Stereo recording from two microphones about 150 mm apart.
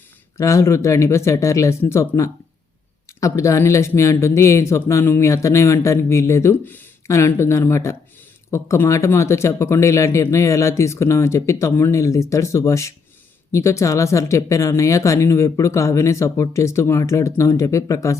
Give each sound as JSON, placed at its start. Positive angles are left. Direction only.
{"t": 0.3, "sound": "speech", "side_deg": 20}